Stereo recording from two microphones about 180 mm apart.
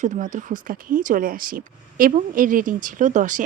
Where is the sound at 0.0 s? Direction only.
45° right (ahead or behind).